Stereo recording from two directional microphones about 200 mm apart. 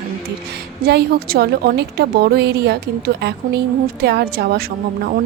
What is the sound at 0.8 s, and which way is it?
A woman's voice, 55° right (ahead or behind).